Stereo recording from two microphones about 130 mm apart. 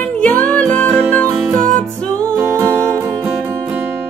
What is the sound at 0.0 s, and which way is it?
Music, 10° left (ahead or behind).